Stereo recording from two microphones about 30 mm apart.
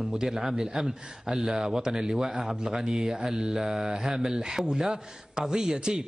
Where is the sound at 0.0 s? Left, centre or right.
Right.